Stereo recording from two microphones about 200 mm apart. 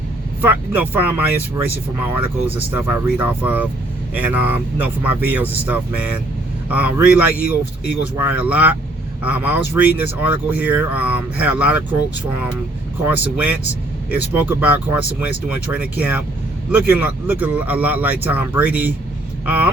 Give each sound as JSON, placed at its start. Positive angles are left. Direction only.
{"t": 0.4, "sound": "speech", "side_deg": -10}
{"t": 13.1, "sound": "speech", "side_deg": -5}